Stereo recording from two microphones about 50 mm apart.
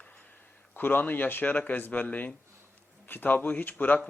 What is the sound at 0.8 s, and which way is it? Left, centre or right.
A man's voice, left.